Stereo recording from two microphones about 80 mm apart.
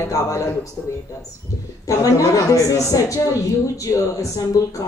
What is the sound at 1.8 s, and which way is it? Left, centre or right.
Speech, left.